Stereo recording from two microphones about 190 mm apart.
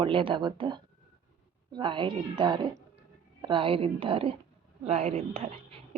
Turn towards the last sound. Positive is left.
turn(degrees=-30)  # may be behind; listen again after turning